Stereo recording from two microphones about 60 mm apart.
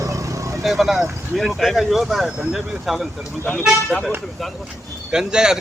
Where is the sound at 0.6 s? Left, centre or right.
Centre.